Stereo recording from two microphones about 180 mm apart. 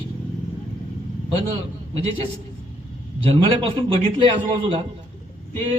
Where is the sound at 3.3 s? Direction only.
30° right (ahead or behind).